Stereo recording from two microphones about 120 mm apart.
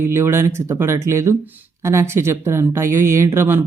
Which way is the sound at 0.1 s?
20° right (ahead or behind).